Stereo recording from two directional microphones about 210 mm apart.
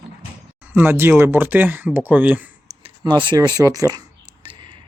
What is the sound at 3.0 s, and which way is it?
Speech, 20° right (ahead or behind).